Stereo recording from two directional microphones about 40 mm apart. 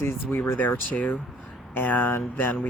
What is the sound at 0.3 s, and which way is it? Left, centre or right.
Speech, left.